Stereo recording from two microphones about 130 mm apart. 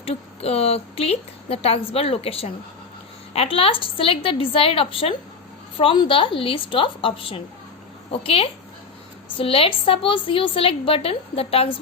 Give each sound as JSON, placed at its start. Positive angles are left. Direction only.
{"t": 0.0, "sound": "a woman's voice", "side_deg": 50}